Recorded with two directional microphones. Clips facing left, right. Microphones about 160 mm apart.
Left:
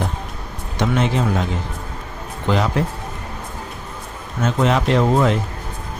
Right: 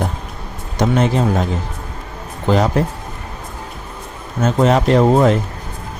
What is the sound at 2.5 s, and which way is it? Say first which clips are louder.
Speech: right 4 dB; 40° right (ahead or behind).